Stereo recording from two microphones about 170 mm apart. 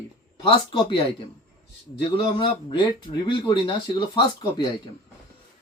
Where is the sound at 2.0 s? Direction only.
30° left (ahead or behind).